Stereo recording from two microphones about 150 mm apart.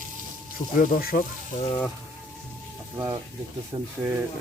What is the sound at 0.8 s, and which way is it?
Speech, 75° left (ahead or behind).